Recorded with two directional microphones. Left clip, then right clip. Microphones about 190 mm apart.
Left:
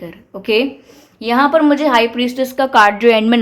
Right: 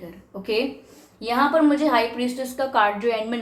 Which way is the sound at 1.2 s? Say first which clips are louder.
Left 7 dB; 50° left (ahead or behind).